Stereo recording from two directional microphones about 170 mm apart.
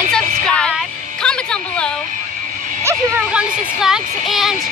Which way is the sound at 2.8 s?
10° right (ahead or behind).